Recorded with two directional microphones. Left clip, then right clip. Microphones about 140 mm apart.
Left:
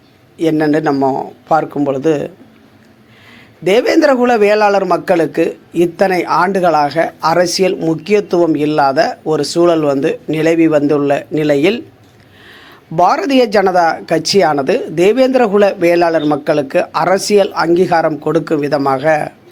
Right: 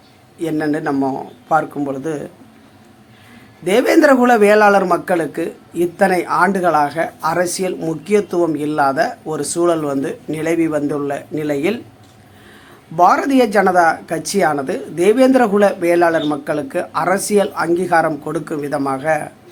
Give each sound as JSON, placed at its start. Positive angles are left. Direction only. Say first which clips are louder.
{"t": 0.5, "sound": "speech", "louder": "left 5 dB", "side_deg": 40}
{"t": 0.9, "sound": "a man's voice", "louder": "left 6 dB", "side_deg": 15}
{"t": 3.6, "sound": "a man's voice", "louder": "left 2 dB", "side_deg": 25}
{"t": 13.0, "sound": "a man's voice", "louder": "left 1 dB", "side_deg": 25}